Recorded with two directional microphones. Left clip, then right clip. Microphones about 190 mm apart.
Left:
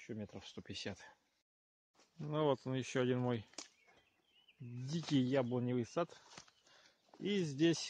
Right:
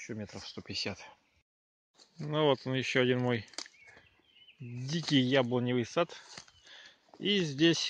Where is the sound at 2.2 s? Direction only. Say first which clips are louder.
Right 7 dB; centre (ahead or behind).